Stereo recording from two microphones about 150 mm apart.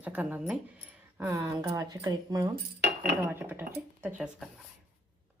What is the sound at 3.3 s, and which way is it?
Speech, 15° right (ahead or behind).